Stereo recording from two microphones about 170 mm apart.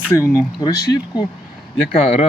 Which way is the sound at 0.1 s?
20° left (ahead or behind).